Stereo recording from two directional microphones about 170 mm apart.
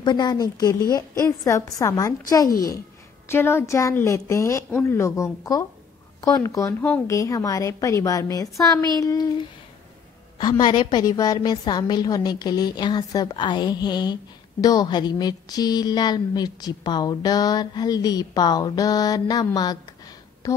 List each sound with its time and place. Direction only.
0.0 s a woman's voice: 25° left (ahead or behind)